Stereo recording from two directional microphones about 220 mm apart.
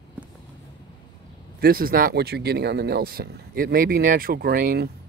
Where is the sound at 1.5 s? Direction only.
40° right (ahead or behind).